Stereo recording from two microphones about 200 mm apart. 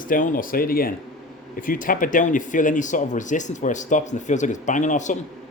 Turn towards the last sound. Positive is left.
turn(degrees=40)  # may be behind; listen again after turning